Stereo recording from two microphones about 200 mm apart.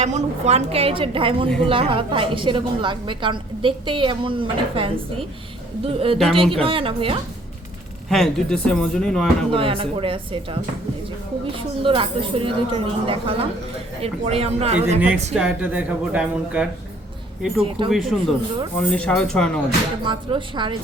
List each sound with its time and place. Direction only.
0.0 s a woman's voice: 35° right (ahead or behind)
8.1 s speech: 5° left (ahead or behind)
9.5 s a woman's voice: 25° right (ahead or behind)
14.8 s a woman's voice: 10° right (ahead or behind)
17.9 s speech: centre (ahead or behind)
20.1 s a woman's voice: 25° right (ahead or behind)